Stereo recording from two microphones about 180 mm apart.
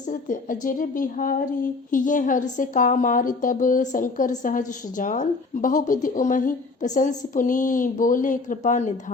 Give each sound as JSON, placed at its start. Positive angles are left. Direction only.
{"t": 0.1, "sound": "a woman's voice", "side_deg": 45}